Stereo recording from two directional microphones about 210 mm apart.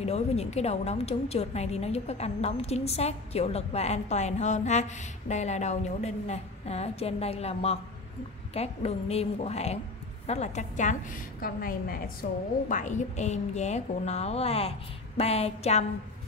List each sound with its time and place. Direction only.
0.0 s a woman's voice: 30° left (ahead or behind)